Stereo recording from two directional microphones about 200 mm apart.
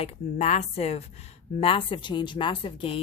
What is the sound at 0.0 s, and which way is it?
A woman's voice, 30° left (ahead or behind).